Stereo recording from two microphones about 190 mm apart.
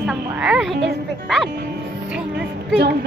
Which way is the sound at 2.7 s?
60° right (ahead or behind).